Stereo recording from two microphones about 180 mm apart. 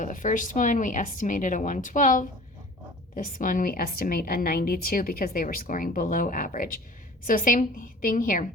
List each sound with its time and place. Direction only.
0.0 s a woman's voice: 45° left (ahead or behind)